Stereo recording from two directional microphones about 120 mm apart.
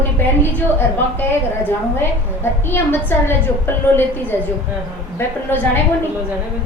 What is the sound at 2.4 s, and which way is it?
A woman's voice, 20° left (ahead or behind).